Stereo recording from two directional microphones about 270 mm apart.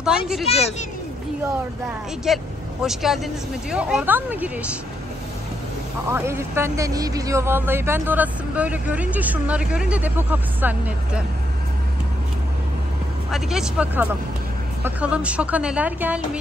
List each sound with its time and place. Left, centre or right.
0.5 s speech: left
2.2 s a woman's voice: centre
6.0 s speech: centre
13.3 s a woman's voice: centre